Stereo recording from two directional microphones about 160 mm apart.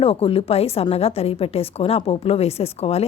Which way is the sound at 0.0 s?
35° left (ahead or behind).